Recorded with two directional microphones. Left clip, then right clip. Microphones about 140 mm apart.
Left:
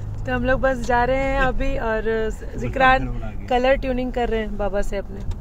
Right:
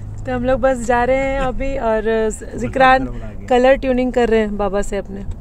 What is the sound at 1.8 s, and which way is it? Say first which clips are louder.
Speech: right 7 dB; 35° right (ahead or behind).